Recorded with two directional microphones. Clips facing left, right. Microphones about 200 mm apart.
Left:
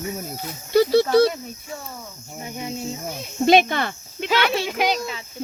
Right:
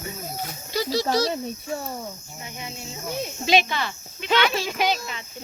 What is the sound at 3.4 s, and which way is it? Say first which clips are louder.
Speech: left 6 dB; 55° left (ahead or behind).